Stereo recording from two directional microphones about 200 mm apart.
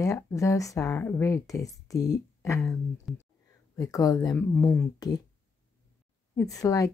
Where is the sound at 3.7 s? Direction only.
15° left (ahead or behind).